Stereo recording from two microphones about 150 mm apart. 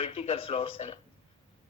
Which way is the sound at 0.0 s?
40° left (ahead or behind).